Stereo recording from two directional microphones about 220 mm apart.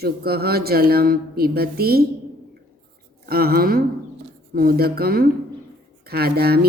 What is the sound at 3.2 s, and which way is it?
Speech, 45° right (ahead or behind).